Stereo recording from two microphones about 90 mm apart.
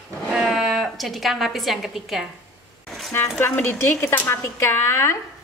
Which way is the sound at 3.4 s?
25° left (ahead or behind).